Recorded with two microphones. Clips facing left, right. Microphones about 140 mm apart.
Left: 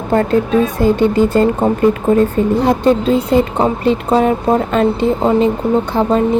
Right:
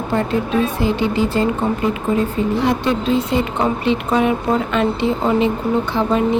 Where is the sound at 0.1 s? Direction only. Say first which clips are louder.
Left 6 dB; 45° left (ahead or behind).